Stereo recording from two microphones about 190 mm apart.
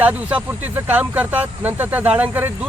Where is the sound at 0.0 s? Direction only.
10° right (ahead or behind).